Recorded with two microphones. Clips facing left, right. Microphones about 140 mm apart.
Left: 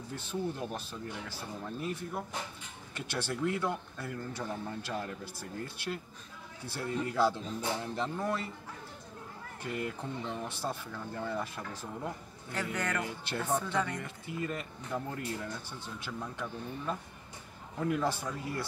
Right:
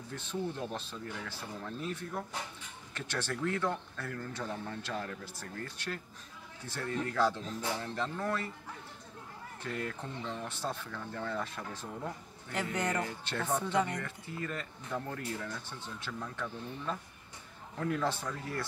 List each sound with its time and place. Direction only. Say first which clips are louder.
0.1 s speech: left 1 dB; 10° left (ahead or behind)
9.6 s speech: left 2 dB; 10° left (ahead or behind)
12.5 s a man's voice: right 1 dB; 20° right (ahead or behind)
13.0 s speech: even; 10° left (ahead or behind)
13.6 s speech: right 2 dB; 20° right (ahead or behind)
14.0 s speech: left 3 dB; 15° left (ahead or behind)